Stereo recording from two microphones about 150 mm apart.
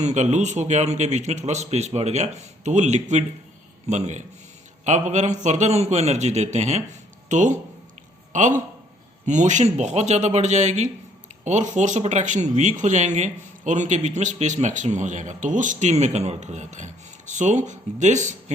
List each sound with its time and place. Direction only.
0.0 s a man's voice: 50° right (ahead or behind)